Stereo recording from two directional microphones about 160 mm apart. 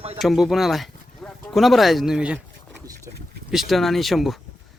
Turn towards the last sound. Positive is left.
turn(degrees=0)  # may be behind; listen again after turning